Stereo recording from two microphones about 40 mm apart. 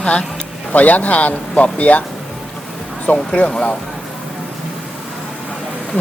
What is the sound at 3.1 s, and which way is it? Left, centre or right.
Speech, left.